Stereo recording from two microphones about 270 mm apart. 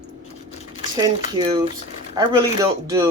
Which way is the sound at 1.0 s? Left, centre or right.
Centre.